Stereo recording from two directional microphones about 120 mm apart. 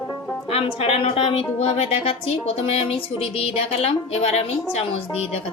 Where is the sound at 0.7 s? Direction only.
55° left (ahead or behind).